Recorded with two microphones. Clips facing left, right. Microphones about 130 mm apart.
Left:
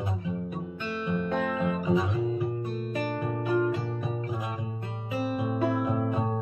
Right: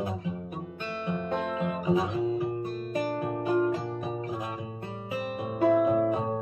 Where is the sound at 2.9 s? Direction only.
35° right (ahead or behind).